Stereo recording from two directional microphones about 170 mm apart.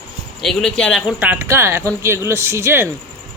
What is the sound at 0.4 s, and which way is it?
Speech, 5° left (ahead or behind).